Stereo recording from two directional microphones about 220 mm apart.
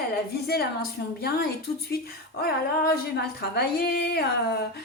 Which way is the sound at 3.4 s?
45° left (ahead or behind).